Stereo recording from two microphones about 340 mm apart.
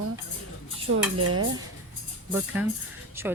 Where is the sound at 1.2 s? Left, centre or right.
Right.